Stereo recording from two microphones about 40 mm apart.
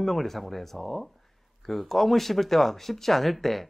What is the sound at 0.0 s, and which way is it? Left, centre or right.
Speech, centre.